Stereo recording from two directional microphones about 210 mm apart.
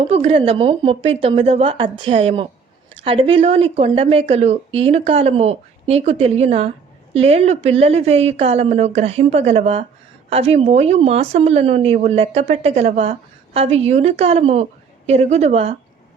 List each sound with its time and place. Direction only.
0.0 s a woman's voice: 30° right (ahead or behind)